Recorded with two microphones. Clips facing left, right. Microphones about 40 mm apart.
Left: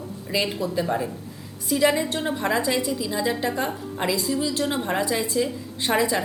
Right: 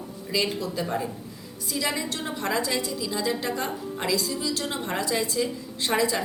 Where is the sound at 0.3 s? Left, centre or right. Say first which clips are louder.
Left 2 dB; centre.